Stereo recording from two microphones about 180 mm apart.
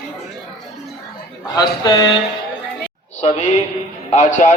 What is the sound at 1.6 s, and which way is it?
Speech, 20° left (ahead or behind).